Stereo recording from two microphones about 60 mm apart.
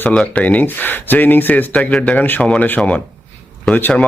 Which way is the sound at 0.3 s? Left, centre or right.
Left.